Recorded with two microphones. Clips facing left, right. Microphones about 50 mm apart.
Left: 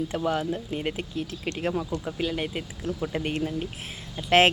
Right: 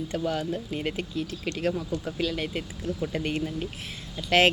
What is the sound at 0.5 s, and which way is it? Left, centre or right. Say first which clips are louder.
Speech: even; centre.